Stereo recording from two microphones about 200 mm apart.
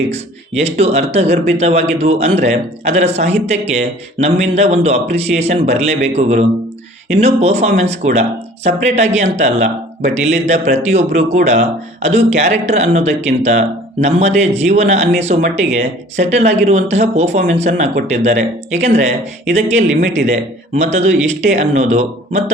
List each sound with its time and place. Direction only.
0.1 s speech: 30° right (ahead or behind)